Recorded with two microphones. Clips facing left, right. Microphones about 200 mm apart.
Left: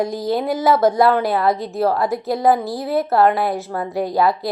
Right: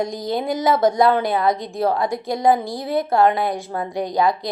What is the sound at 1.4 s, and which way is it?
Speech, 5° left (ahead or behind).